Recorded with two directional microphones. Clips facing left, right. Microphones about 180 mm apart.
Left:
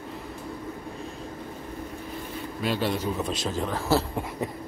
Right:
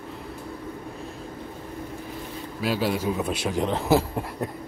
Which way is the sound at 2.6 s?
5° right (ahead or behind).